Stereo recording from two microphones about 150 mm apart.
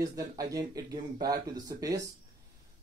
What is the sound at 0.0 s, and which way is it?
Speech, 25° right (ahead or behind).